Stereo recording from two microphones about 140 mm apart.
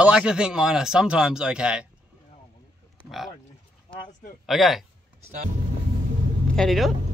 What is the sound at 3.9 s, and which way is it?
Speech, 40° left (ahead or behind).